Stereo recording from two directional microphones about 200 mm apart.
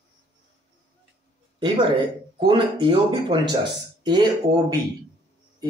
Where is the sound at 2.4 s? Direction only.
25° right (ahead or behind).